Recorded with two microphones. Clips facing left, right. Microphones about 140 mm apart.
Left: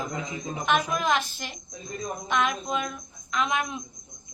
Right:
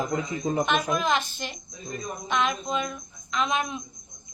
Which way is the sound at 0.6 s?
5° left (ahead or behind).